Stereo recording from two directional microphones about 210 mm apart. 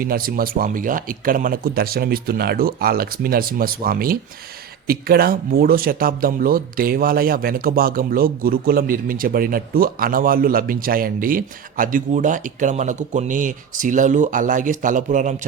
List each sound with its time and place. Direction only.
0.0 s speech: 45° right (ahead or behind)